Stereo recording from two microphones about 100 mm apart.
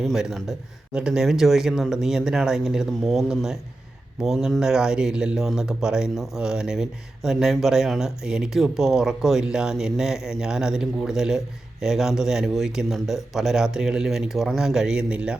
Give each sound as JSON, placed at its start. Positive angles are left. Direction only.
{"t": 0.0, "sound": "speech", "side_deg": -5}